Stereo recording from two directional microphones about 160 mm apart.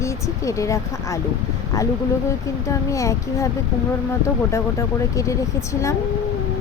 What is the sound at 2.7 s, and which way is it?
Speech, 20° left (ahead or behind).